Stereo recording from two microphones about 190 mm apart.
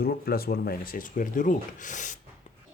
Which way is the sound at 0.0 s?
55° left (ahead or behind).